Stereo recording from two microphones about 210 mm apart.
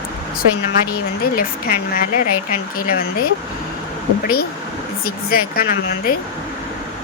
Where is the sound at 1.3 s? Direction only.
45° left (ahead or behind).